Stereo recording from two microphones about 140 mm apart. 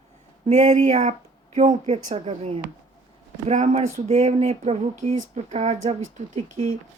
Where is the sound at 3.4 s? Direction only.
55° right (ahead or behind).